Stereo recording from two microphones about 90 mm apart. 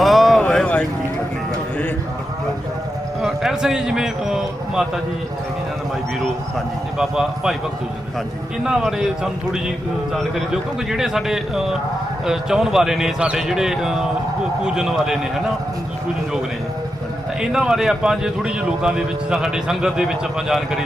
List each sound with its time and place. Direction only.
0.0 s a sound: centre (ahead or behind)
3.2 s speech: 5° right (ahead or behind)
7.0 s a man's voice: 5° right (ahead or behind)
8.6 s a man's voice: 5° right (ahead or behind)
17.5 s a man's voice: 5° right (ahead or behind)